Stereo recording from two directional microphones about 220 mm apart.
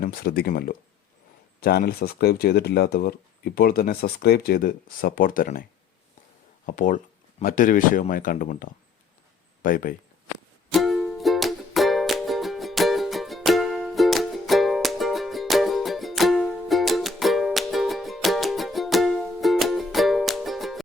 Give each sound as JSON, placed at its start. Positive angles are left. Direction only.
{"t": 0.0, "sound": "speech", "side_deg": 40}
{"t": 6.7, "sound": "speech", "side_deg": 35}
{"t": 10.7, "sound": "music", "side_deg": 0}